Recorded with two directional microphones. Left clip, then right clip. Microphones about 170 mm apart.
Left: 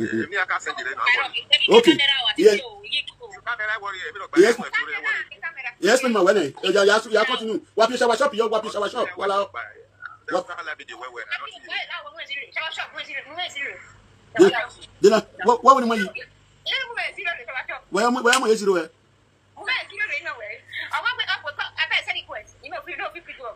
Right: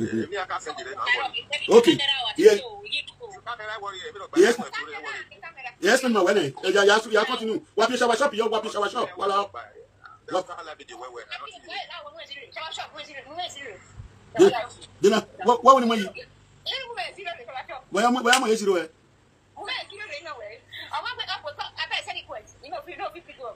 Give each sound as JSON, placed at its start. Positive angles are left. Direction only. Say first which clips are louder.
{"t": 0.0, "sound": "a man's voice", "louder": "left 5 dB", "side_deg": 0}
{"t": 19.6, "sound": "a sound", "louder": "left 8 dB", "side_deg": -5}
{"t": 21.5, "sound": "telephone", "louder": "left 8 dB", "side_deg": 0}